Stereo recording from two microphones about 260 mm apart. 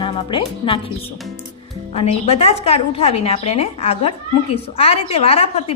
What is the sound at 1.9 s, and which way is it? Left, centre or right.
A woman's voice, left.